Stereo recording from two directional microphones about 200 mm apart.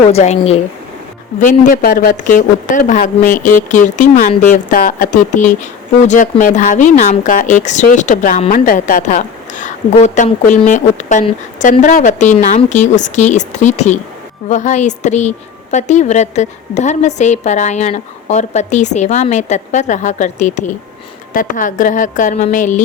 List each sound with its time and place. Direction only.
0.1 s a woman's voice: 35° left (ahead or behind)
1.5 s a woman's voice: 45° left (ahead or behind)